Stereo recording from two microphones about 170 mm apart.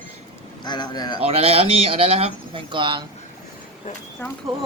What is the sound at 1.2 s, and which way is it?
Speech, 35° right (ahead or behind).